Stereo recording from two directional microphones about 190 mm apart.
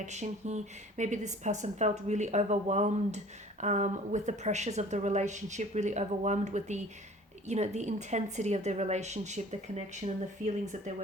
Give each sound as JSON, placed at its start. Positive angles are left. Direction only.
{"t": 0.0, "sound": "speech", "side_deg": -40}